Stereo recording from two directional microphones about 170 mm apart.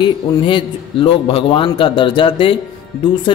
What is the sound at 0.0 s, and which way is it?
A man's voice, 30° left (ahead or behind).